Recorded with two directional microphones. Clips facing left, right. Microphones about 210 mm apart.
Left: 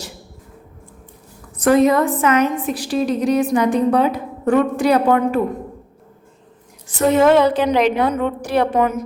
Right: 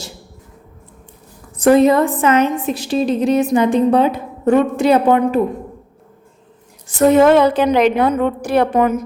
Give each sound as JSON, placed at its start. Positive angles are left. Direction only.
{"t": 1.5, "sound": "a woman's voice", "side_deg": -30}
{"t": 6.8, "sound": "a woman's voice", "side_deg": -50}